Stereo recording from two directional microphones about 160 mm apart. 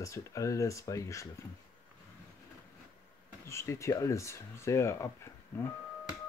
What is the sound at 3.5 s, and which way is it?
Speech, 20° left (ahead or behind).